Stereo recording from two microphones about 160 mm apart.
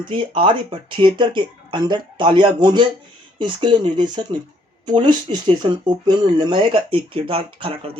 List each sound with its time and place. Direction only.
0.1 s speech: 35° right (ahead or behind)